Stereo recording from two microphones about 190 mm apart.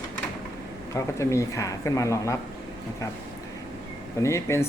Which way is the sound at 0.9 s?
15° left (ahead or behind).